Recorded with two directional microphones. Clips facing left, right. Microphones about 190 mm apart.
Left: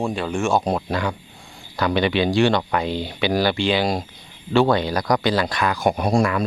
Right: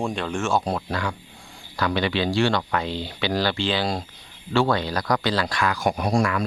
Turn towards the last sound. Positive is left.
turn(degrees=25)  # may be behind; listen again after turning